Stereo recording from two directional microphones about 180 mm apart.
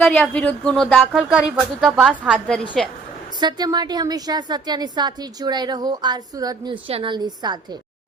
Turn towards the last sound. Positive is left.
turn(degrees=-25)  # may be behind; listen again after turning